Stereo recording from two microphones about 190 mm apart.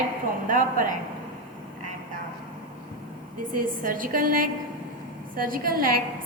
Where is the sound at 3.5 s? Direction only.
45° right (ahead or behind).